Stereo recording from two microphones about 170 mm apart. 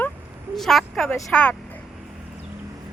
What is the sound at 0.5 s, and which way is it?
A woman's voice, centre (ahead or behind).